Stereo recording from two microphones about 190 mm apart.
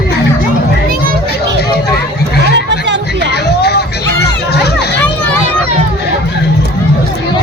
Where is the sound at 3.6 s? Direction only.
55° left (ahead or behind).